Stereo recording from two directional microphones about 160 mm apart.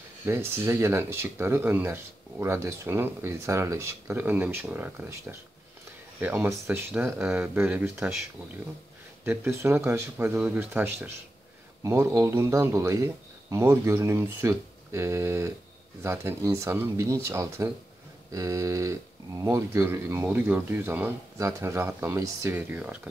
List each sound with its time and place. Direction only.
0.2 s speech: 15° right (ahead or behind)
9.2 s speech: 15° right (ahead or behind)